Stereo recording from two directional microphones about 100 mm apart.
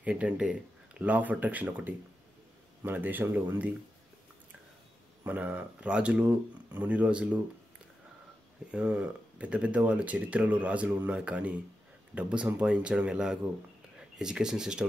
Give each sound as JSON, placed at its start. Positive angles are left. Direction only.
{"t": 0.0, "sound": "speech", "side_deg": -10}
{"t": 5.2, "sound": "speech", "side_deg": -15}
{"t": 8.7, "sound": "speech", "side_deg": -10}